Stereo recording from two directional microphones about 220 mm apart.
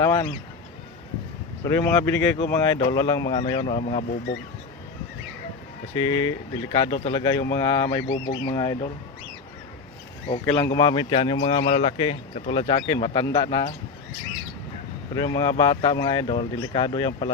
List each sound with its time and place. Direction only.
0.0 s speech: 20° left (ahead or behind)
1.6 s speech: 15° left (ahead or behind)
5.9 s speech: 20° left (ahead or behind)
10.2 s speech: 25° left (ahead or behind)
15.1 s speech: 20° left (ahead or behind)